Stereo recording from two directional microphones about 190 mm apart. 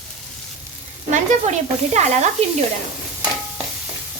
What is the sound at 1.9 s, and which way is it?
Speech, 35° right (ahead or behind).